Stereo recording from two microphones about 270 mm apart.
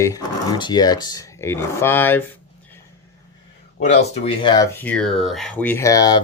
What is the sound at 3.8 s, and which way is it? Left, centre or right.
Speech, left.